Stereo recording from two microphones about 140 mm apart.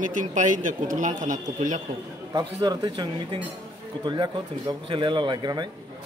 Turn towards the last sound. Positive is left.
turn(degrees=-30)  # may be behind; listen again after turning